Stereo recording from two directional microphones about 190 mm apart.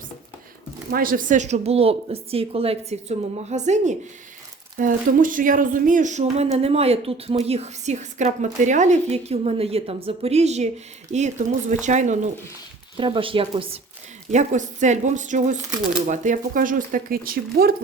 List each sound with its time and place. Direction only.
0.9 s speech: 50° right (ahead or behind)
13.0 s a woman's voice: 25° right (ahead or behind)
14.3 s speech: 40° right (ahead or behind)